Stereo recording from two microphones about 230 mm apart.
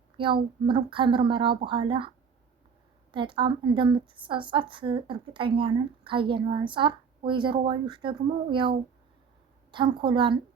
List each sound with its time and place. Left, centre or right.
0.2 s a woman's voice: right
3.1 s a woman's voice: right
9.7 s a woman's voice: right